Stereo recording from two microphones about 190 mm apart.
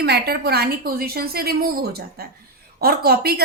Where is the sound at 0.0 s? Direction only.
55° right (ahead or behind).